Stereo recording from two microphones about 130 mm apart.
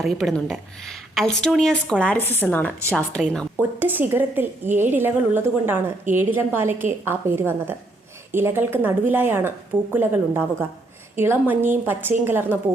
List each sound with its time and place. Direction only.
0.0 s a woman's voice: centre (ahead or behind)
3.6 s a woman's voice: 15° right (ahead or behind)